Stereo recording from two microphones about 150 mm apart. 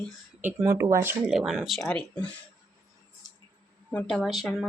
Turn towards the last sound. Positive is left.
turn(degrees=0)  # may be behind; listen again after turning